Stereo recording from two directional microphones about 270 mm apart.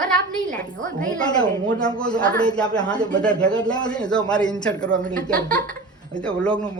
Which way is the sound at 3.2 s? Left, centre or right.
Centre.